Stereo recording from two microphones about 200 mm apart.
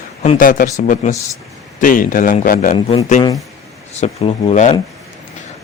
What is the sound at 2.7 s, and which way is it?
A man's voice, 30° left (ahead or behind).